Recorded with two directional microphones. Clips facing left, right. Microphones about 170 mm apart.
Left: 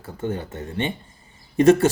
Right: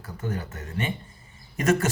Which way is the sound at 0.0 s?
25° left (ahead or behind).